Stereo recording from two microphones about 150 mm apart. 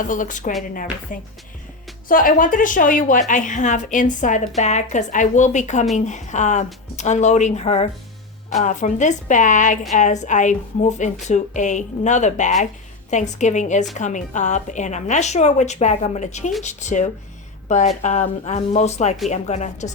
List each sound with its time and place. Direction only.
0.0 s a woman's voice: 60° left (ahead or behind)